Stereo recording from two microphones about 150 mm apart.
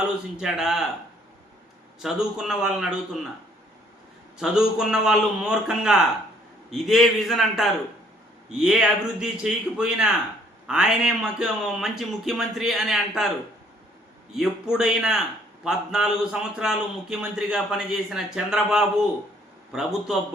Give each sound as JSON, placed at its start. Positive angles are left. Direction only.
{"t": 0.3, "sound": "speech", "side_deg": -5}
{"t": 2.0, "sound": "speech", "side_deg": 0}
{"t": 4.4, "sound": "speech", "side_deg": -5}
{"t": 14.3, "sound": "speech", "side_deg": -5}